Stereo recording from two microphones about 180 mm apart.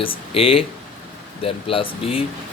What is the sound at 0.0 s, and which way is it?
Speech, 30° left (ahead or behind).